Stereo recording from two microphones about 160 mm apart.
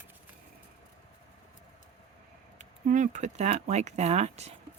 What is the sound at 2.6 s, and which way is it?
Speech, 50° right (ahead or behind).